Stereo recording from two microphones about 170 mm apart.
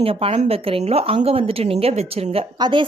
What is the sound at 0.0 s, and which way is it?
A woman's voice, 35° right (ahead or behind).